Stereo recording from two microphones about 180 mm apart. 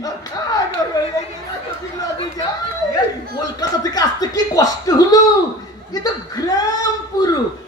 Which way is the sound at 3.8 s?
20° left (ahead or behind).